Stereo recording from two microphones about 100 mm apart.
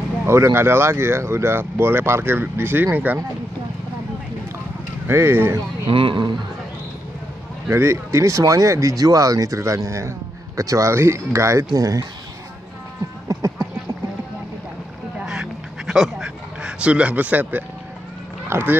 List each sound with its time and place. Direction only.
0.3 s speech: 25° right (ahead or behind)
5.0 s speech: 25° right (ahead or behind)
5.9 s speech: 55° right (ahead or behind)
7.7 s speech: 30° right (ahead or behind)
13.3 s a sound: 35° right (ahead or behind)
15.1 s duck: 5° right (ahead or behind)
15.9 s speech: 5° right (ahead or behind); by 18.8 s 20° right (ahead or behind)